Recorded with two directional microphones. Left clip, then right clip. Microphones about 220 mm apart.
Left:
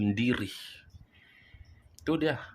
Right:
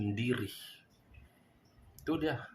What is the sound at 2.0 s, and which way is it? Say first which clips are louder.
Speech: left 5 dB; 40° left (ahead or behind).